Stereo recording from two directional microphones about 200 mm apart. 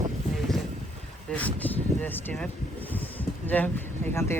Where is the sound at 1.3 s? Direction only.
5° left (ahead or behind).